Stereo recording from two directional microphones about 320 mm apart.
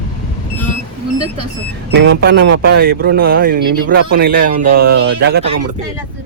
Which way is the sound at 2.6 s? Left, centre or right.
Right.